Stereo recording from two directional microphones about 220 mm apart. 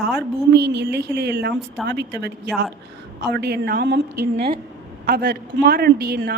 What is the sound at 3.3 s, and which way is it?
A woman's voice, 45° right (ahead or behind).